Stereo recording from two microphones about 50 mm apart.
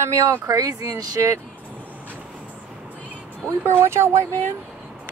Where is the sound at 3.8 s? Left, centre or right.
Right.